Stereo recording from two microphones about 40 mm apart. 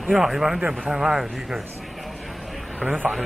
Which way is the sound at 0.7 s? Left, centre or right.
Centre.